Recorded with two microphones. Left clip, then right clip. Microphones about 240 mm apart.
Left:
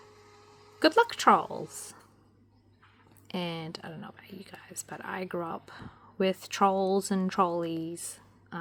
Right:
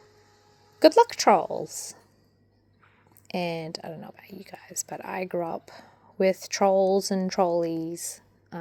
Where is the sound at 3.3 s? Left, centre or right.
Left.